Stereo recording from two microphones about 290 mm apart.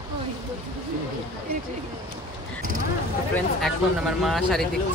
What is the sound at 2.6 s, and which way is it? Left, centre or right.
Speech, right.